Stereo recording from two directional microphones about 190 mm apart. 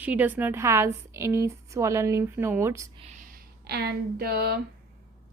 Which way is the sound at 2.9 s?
35° right (ahead or behind).